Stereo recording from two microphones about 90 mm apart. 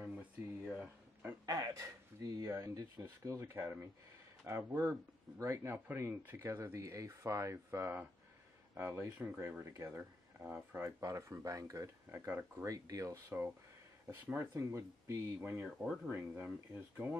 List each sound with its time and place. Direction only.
0.0 s a sound: 15° right (ahead or behind)
1.4 s speech: 40° right (ahead or behind); by 10.9 s 25° right (ahead or behind)
11.0 s speech: 35° right (ahead or behind)
12.1 s speech: 25° right (ahead or behind)
12.6 s speech: 40° right (ahead or behind)
14.2 s speech: 30° right (ahead or behind)